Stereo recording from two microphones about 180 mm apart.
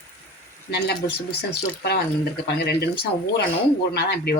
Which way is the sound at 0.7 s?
65° left (ahead or behind).